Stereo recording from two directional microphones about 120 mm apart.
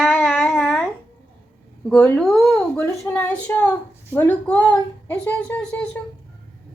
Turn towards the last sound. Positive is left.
turn(degrees=10)  # may be behind; listen again after turning